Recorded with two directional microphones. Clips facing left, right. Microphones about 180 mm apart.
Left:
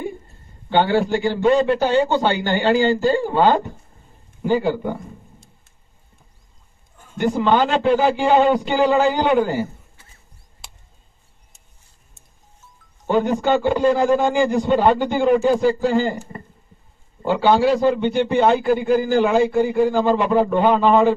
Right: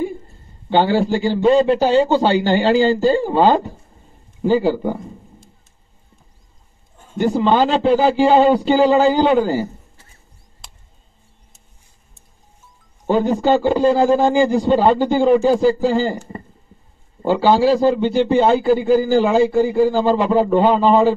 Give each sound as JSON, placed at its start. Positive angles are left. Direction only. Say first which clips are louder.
{"t": 0.7, "sound": "a man's voice", "louder": "right 2 dB", "side_deg": -30}
{"t": 7.0, "sound": "a man's voice", "louder": "right 3 dB", "side_deg": -30}
{"t": 13.1, "sound": "a man's voice", "louder": "right 2 dB", "side_deg": -30}
{"t": 17.3, "sound": "a man's voice", "louder": "right 2 dB", "side_deg": -30}